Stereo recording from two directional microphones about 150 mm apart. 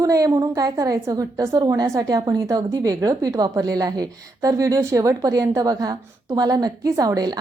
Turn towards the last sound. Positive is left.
turn(degrees=-25)  # may be behind; listen again after turning